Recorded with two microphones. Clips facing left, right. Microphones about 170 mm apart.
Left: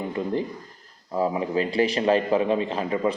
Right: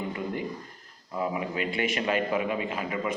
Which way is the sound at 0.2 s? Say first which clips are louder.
Left 5 dB; 30° left (ahead or behind).